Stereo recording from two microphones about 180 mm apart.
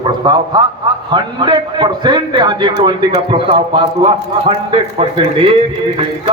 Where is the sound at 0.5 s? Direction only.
25° right (ahead or behind).